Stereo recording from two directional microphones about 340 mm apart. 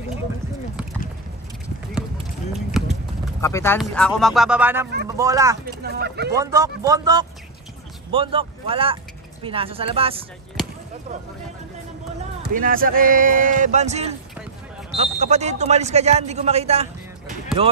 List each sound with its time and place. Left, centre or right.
2.8 s clip-clop: centre
3.3 s speech: centre
5.8 s speech: right
6.3 s speech: centre
12.4 s speech: right